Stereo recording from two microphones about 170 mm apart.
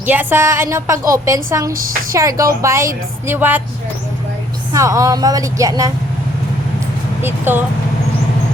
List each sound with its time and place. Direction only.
0.0 s a woman's voice: 10° right (ahead or behind)
4.7 s a woman's voice: 20° right (ahead or behind)
7.2 s a woman's voice: 10° right (ahead or behind)